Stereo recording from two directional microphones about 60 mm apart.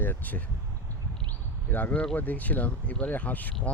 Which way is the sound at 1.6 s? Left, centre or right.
Left.